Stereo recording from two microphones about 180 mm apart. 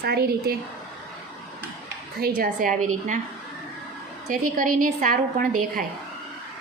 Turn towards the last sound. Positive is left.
turn(degrees=-50)  # may be behind; listen again after turning